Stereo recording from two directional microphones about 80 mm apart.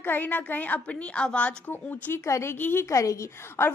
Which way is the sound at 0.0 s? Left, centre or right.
Left.